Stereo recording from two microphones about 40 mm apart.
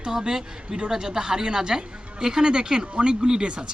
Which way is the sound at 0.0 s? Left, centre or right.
Centre.